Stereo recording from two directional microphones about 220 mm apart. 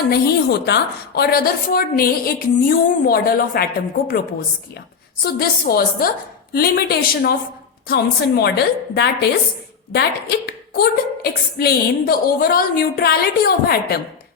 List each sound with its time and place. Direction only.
0.1 s a woman's voice: 50° left (ahead or behind)
5.2 s a woman's voice: 45° left (ahead or behind)
8.4 s a woman's voice: 45° left (ahead or behind)